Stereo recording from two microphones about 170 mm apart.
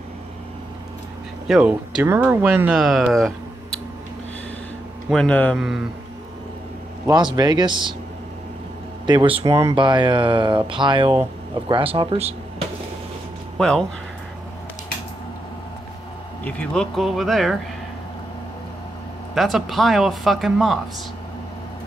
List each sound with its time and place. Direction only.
1.5 s speech: 5° right (ahead or behind)
5.1 s speech: 5° left (ahead or behind)
7.3 s speech: 25° right (ahead or behind)
9.0 s speech: 30° right (ahead or behind)
13.6 s speech: 5° left (ahead or behind)
16.4 s speech: 5° left (ahead or behind)
19.3 s speech: centre (ahead or behind)